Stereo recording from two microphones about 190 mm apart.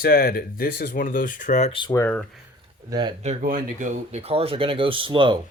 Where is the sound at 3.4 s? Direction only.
45° right (ahead or behind).